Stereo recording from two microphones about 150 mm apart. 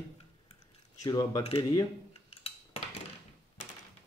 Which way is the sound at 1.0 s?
25° left (ahead or behind).